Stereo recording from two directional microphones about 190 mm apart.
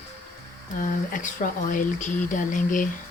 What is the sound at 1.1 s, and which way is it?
A woman's voice, 45° left (ahead or behind).